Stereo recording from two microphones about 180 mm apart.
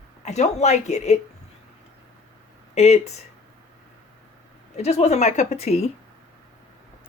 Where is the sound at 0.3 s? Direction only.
40° left (ahead or behind).